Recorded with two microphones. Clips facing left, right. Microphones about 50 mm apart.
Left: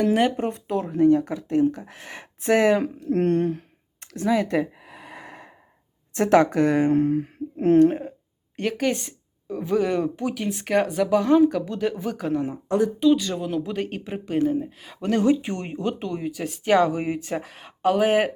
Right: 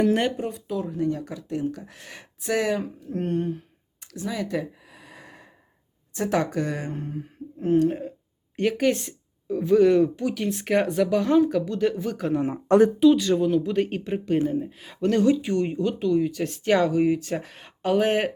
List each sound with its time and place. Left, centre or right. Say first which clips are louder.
0.0 s speech: left 1 dB; centre
0.3 s speech: left 3 dB; left
1.7 s speech: left 2 dB; left
2.4 s speech: left 6 dB; left
2.7 s speech: left 7 dB; left
4.0 s a sound: left 8 dB; left
6.1 s speech: left 7 dB; left
6.9 s a sound: left 13 dB; left
8.5 s speech: right 2 dB; centre
15.2 s speech: even; left
16.2 s speech: right 2 dB; centre
17.0 s speech: right 6 dB; left
17.3 s speech: left 1 dB; centre